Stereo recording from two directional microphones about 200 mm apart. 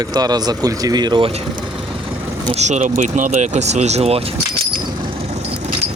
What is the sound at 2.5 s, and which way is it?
Speech, 35° right (ahead or behind).